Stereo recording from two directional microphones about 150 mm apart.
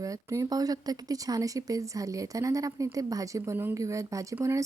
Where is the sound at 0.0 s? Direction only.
20° right (ahead or behind).